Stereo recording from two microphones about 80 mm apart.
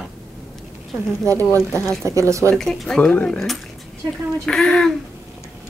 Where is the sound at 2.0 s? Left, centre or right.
Right.